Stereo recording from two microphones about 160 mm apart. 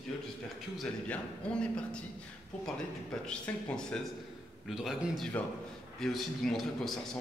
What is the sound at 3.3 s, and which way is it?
A man's voice, 5° left (ahead or behind).